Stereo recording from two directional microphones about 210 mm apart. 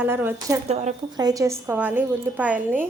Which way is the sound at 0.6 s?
30° right (ahead or behind).